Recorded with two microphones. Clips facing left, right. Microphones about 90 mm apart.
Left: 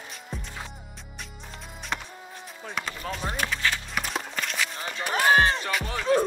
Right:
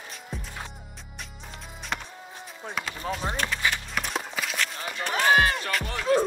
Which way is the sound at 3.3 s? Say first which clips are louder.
Left 3 dB; 5° left (ahead or behind).